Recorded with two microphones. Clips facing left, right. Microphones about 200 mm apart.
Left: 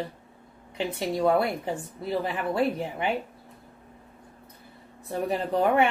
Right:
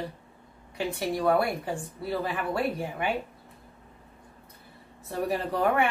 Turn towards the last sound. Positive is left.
turn(degrees=20)  # may be behind; listen again after turning